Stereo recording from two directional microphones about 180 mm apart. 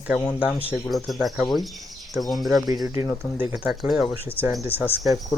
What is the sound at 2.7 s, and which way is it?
Speech, 20° right (ahead or behind).